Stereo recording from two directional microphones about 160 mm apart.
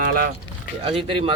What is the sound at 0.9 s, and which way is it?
Speech, 35° right (ahead or behind).